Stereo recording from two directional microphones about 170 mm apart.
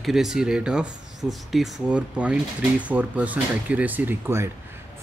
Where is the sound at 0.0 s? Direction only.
Centre (ahead or behind).